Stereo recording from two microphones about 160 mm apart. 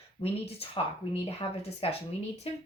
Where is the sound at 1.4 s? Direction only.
25° left (ahead or behind).